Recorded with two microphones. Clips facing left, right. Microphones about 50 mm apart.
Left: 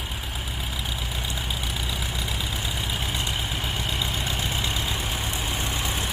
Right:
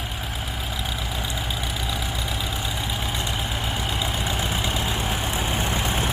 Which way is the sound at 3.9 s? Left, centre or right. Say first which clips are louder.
Right 2 dB; centre.